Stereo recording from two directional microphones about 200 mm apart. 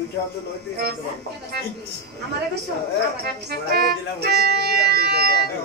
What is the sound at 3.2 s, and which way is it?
Music, 50° right (ahead or behind).